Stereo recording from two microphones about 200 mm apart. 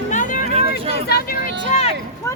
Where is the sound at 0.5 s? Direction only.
30° right (ahead or behind).